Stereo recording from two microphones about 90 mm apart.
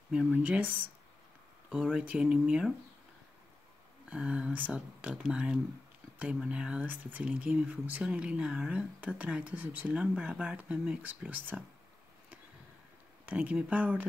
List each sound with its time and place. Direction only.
0.3 s speech: 15° right (ahead or behind)
4.1 s speech: 10° right (ahead or behind)
13.2 s speech: 15° right (ahead or behind)